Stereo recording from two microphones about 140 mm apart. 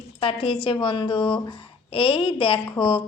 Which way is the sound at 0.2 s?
40° left (ahead or behind).